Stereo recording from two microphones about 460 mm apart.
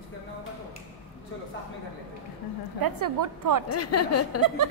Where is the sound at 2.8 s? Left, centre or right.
Right.